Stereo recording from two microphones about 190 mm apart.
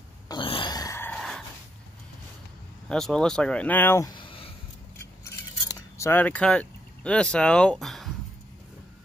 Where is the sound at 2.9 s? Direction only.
5° left (ahead or behind); by 4.5 s 30° left (ahead or behind).